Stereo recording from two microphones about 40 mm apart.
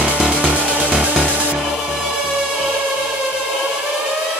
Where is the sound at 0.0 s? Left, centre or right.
Right.